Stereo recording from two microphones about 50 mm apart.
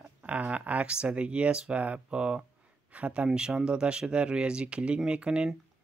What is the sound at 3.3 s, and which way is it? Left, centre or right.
Speech, centre.